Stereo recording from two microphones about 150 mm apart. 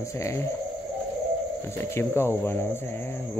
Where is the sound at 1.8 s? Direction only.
15° left (ahead or behind).